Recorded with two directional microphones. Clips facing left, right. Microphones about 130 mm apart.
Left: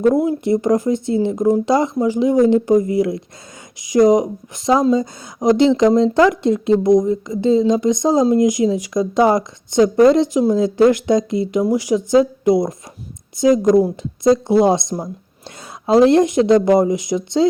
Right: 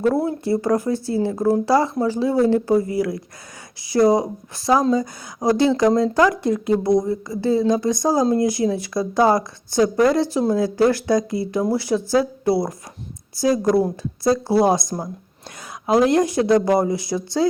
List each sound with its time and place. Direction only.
0.0 s a woman's voice: 15° left (ahead or behind)